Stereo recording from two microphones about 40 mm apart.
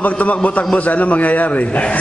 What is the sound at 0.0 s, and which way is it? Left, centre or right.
A man's voice, left.